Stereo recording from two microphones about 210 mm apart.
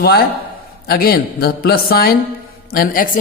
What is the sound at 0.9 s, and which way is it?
A man's voice, 45° left (ahead or behind).